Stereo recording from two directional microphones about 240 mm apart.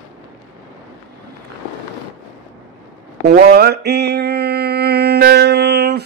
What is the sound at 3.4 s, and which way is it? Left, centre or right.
Mantra, right.